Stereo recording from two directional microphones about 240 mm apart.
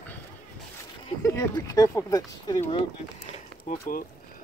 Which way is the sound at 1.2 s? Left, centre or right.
Centre.